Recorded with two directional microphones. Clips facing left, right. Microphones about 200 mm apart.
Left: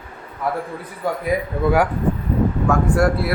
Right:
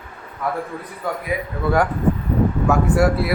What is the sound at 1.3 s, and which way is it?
Speech, 40° left (ahead or behind).